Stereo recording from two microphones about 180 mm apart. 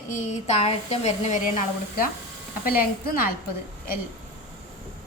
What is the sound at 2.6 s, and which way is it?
Speech, 55° left (ahead or behind).